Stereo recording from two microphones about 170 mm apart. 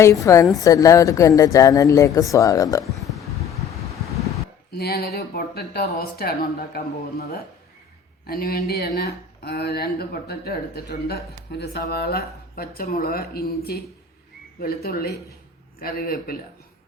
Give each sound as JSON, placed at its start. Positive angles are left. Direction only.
{"t": 0.0, "sound": "a woman's voice", "side_deg": 20}
{"t": 2.8, "sound": "a sound", "side_deg": 0}
{"t": 4.8, "sound": "speech", "side_deg": 65}
{"t": 8.3, "sound": "speech", "side_deg": 65}